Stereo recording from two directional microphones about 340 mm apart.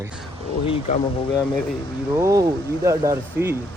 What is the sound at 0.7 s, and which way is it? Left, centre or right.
Speech, centre.